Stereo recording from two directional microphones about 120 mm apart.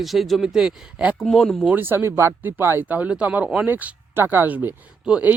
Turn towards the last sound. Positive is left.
turn(degrees=-10)  # may be behind; listen again after turning